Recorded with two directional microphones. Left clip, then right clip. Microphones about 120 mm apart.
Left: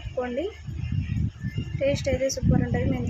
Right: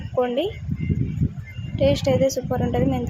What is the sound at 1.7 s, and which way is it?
Speech, 25° right (ahead or behind).